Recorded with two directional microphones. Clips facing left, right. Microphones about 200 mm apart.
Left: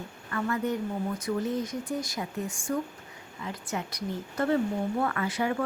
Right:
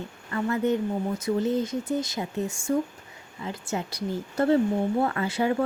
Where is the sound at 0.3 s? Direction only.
25° right (ahead or behind).